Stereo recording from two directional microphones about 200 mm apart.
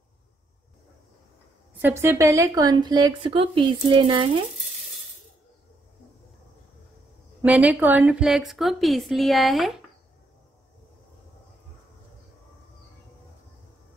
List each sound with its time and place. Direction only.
1.8 s a woman's voice: 10° right (ahead or behind)
7.4 s a woman's voice: 5° right (ahead or behind)